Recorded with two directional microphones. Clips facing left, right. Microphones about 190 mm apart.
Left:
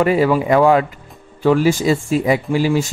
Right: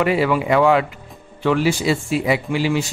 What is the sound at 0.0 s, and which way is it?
Speech, 40° left (ahead or behind).